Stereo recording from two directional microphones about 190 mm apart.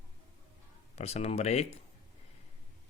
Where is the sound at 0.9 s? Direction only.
35° left (ahead or behind).